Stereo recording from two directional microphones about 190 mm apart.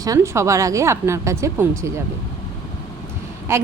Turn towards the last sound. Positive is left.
turn(degrees=-15)  # may be behind; listen again after turning